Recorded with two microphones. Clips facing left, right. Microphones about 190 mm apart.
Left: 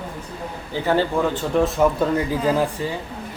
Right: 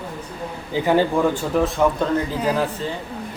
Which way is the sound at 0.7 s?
15° right (ahead or behind).